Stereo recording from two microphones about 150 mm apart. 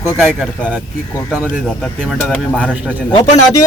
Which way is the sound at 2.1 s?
5° left (ahead or behind).